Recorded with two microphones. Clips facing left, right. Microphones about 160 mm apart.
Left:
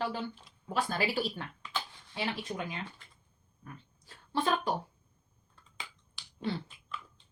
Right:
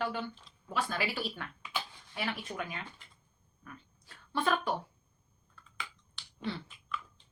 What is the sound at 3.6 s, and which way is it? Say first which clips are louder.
Dog: left 1 dB; 35° left (ahead or behind).